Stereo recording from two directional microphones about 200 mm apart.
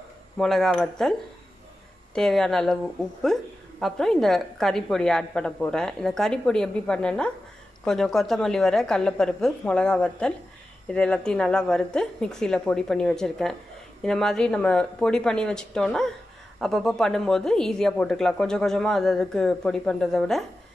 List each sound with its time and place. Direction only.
0.4 s a woman's voice: centre (ahead or behind)
2.1 s a woman's voice: 5° left (ahead or behind)